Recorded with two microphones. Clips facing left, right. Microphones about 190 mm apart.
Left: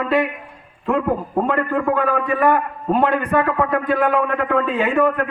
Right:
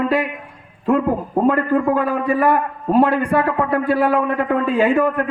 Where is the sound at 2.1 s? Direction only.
35° right (ahead or behind).